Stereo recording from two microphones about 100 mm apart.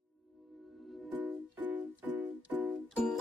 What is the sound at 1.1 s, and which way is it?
Music, 15° right (ahead or behind).